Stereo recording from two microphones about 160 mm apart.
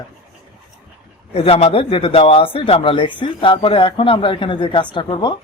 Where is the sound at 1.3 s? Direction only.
40° left (ahead or behind).